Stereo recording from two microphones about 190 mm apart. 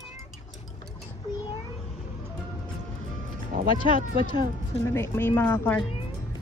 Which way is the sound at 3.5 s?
45° right (ahead or behind).